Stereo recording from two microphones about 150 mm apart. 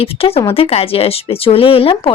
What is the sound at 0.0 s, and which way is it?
Speech, 40° left (ahead or behind).